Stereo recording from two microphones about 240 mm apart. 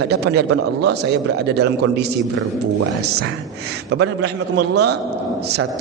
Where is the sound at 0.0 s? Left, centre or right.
Right.